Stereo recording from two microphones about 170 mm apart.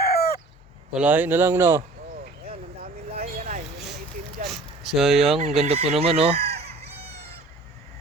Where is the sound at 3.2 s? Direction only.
45° right (ahead or behind).